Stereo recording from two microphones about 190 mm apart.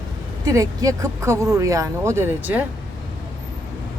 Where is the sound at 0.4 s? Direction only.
20° right (ahead or behind).